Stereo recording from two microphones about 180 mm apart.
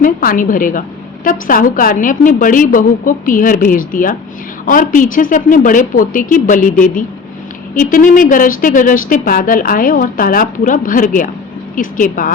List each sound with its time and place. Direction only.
0.0 s a woman's voice: 50° left (ahead or behind)